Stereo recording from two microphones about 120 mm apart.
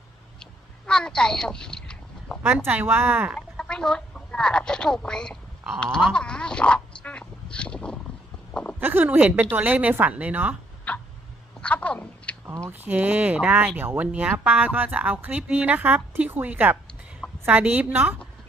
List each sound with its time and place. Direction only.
0.9 s quack: 5° left (ahead or behind)
2.6 s speech: 15° right (ahead or behind)
3.3 s speech: 5° left (ahead or behind)
7.5 s a sound: 10° left (ahead or behind)
8.8 s speech: 15° right (ahead or behind)
10.9 s tick-tock: 10° left (ahead or behind)
11.6 s a sound: 10° left (ahead or behind)
12.5 s a woman's voice: 20° right (ahead or behind)